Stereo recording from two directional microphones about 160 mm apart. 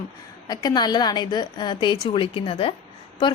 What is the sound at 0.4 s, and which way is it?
A woman's voice, 25° left (ahead or behind).